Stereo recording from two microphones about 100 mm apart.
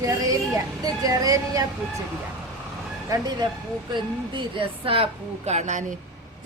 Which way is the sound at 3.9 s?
55° right (ahead or behind).